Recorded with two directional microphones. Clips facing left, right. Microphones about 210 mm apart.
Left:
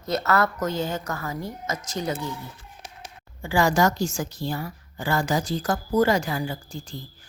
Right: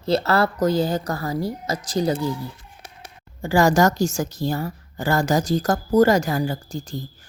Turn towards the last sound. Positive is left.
turn(degrees=-40)  # may be behind; listen again after turning